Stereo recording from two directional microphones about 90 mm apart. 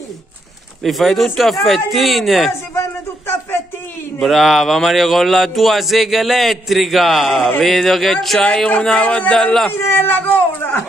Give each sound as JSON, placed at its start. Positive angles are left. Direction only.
{"t": 0.8, "sound": "speech", "side_deg": 0}
{"t": 2.7, "sound": "a sound", "side_deg": 30}
{"t": 4.2, "sound": "speech", "side_deg": 0}
{"t": 9.7, "sound": "speech", "side_deg": 25}